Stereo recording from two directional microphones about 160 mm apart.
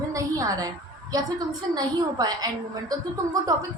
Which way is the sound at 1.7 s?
25° right (ahead or behind).